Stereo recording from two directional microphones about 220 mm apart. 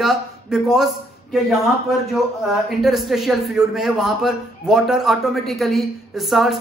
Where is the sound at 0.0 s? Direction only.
Centre (ahead or behind).